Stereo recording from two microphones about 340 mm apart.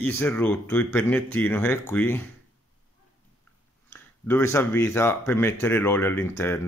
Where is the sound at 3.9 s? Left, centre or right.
Centre.